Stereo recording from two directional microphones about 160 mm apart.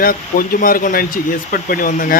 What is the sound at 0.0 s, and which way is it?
Speech, 65° left (ahead or behind).